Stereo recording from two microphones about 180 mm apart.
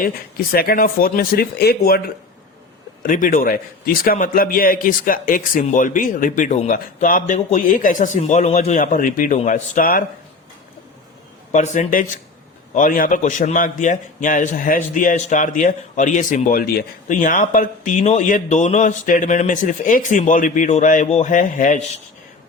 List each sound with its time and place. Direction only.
0.5 s speech: 55° left (ahead or behind)
3.0 s a man's voice: 50° left (ahead or behind)
11.5 s a man's voice: 45° left (ahead or behind)